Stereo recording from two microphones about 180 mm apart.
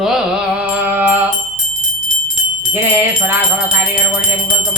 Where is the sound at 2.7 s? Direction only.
10° right (ahead or behind).